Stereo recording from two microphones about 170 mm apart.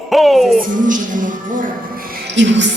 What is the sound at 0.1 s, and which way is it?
Music, centre (ahead or behind).